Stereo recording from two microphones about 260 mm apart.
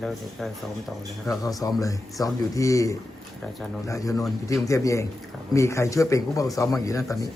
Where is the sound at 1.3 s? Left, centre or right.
Centre.